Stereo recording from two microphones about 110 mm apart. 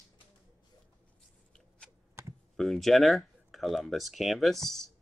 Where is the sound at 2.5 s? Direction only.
Centre (ahead or behind).